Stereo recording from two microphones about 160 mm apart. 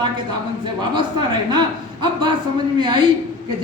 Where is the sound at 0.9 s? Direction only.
30° right (ahead or behind).